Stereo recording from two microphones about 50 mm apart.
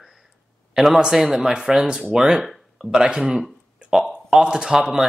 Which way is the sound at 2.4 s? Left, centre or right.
Centre.